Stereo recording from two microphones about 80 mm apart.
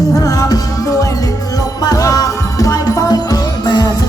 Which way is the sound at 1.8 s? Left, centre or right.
Left.